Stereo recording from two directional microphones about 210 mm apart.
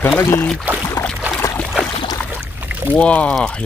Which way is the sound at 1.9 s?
20° left (ahead or behind).